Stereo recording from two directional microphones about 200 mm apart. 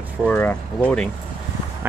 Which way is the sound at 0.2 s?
5° left (ahead or behind).